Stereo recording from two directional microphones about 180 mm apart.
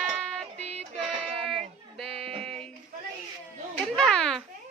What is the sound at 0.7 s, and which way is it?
Music, 35° right (ahead or behind).